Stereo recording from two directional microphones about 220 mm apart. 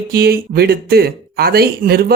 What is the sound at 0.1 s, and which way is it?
Speech, 45° right (ahead or behind).